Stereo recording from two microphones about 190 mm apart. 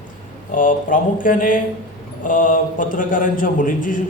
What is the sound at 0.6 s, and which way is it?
A man's voice, 45° left (ahead or behind).